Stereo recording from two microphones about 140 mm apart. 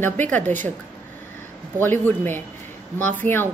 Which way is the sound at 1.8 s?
15° left (ahead or behind).